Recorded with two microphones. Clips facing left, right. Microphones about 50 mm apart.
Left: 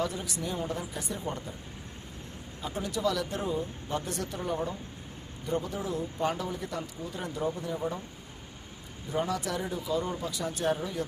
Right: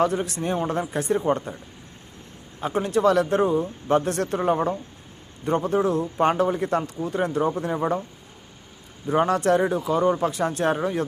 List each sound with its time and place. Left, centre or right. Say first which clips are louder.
0.0 s speech: right 10 dB; right
2.6 s speech: right 11 dB; right
9.0 s speech: right 11 dB; right